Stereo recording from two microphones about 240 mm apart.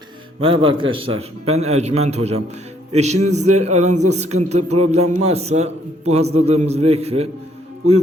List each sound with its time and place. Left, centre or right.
0.3 s speech: right